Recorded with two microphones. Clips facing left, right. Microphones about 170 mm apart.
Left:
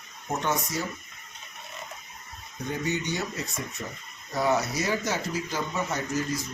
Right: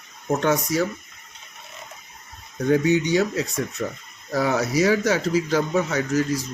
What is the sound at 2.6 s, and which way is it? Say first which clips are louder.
Speech: right 11 dB; 90° right.